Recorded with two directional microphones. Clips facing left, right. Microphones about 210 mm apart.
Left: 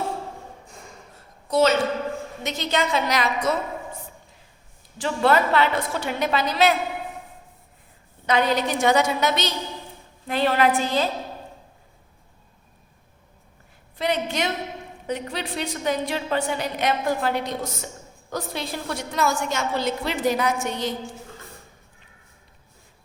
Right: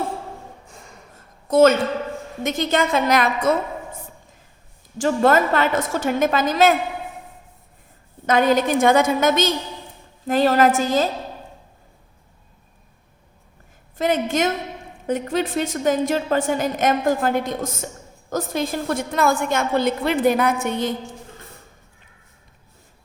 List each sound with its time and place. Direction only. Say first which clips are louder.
1.5 s a woman's voice: right 5 dB; 50° right (ahead or behind)
4.9 s a woman's voice: right 4 dB; 45° right (ahead or behind)
8.3 s a woman's voice: right 5 dB; 45° right (ahead or behind)
14.0 s a woman's voice: right 5 dB; 45° right (ahead or behind)